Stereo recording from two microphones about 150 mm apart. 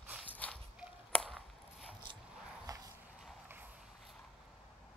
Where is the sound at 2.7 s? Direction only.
25° right (ahead or behind).